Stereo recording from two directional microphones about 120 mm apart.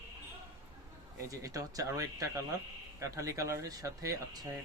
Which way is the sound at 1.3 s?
30° right (ahead or behind).